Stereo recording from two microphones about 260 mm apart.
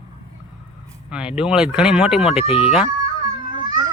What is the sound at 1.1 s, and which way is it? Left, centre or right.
Speech, centre.